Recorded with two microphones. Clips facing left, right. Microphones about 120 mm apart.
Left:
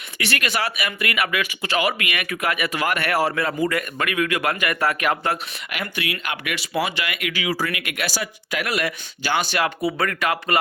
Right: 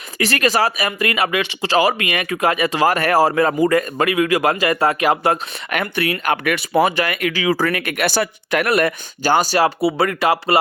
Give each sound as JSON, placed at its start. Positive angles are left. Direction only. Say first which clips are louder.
{"t": 0.2, "sound": "speech", "louder": "right 7 dB", "side_deg": -35}
{"t": 5.7, "sound": "speech", "louder": "right 8 dB", "side_deg": -50}
{"t": 7.9, "sound": "speech", "louder": "right 8 dB", "side_deg": -60}